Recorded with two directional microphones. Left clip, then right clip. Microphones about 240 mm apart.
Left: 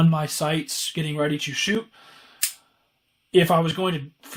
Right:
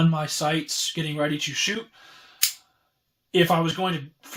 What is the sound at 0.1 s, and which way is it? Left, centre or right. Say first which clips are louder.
Speech: even; left.